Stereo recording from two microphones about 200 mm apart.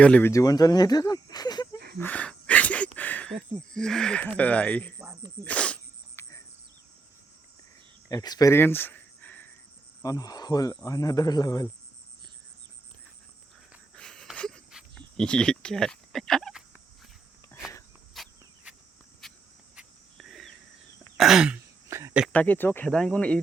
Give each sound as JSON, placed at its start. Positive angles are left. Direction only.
{"t": 0.0, "sound": "speech", "side_deg": 10}
{"t": 2.0, "sound": "a sound", "side_deg": 10}
{"t": 3.8, "sound": "speech", "side_deg": 5}
{"t": 5.5, "sound": "cricket", "side_deg": 5}
{"t": 8.1, "sound": "a sound", "side_deg": 20}
{"t": 10.0, "sound": "speech", "side_deg": 20}
{"t": 13.9, "sound": "a sound", "side_deg": 5}
{"t": 18.1, "sound": "cricket", "side_deg": 0}
{"t": 19.2, "sound": "insect", "side_deg": 0}
{"t": 19.7, "sound": "a sound", "side_deg": 0}
{"t": 21.2, "sound": "throat clearing", "side_deg": 0}
{"t": 22.3, "sound": "speech", "side_deg": 10}